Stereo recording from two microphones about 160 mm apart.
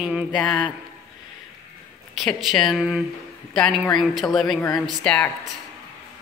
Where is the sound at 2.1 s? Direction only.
Centre (ahead or behind).